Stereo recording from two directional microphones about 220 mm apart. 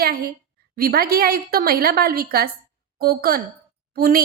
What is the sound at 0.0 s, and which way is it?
A woman's voice, 45° right (ahead or behind).